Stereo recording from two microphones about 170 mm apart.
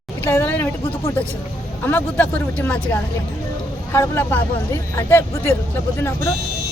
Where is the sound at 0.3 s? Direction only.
10° left (ahead or behind).